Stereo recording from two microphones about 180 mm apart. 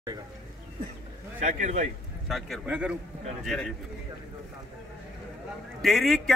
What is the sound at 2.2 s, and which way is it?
Speech, centre (ahead or behind).